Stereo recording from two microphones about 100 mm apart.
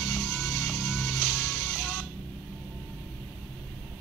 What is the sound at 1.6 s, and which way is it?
Music, 15° left (ahead or behind).